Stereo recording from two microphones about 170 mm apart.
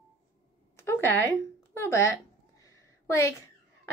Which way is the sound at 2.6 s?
15° left (ahead or behind).